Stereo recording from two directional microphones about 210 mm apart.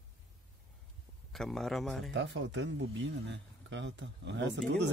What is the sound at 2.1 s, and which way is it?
Speech, 60° right (ahead or behind).